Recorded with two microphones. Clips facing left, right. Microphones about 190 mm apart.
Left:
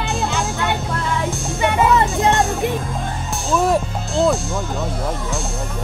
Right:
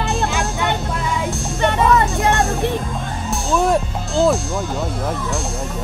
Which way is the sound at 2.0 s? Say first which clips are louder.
Left 1 dB; 20° left (ahead or behind).